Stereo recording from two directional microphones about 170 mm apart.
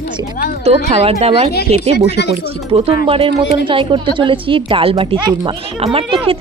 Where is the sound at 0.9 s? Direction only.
40° right (ahead or behind).